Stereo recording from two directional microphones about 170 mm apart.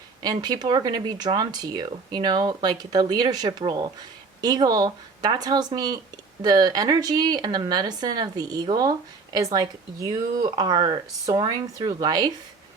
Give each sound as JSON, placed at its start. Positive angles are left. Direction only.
{"t": 0.2, "sound": "speech", "side_deg": -25}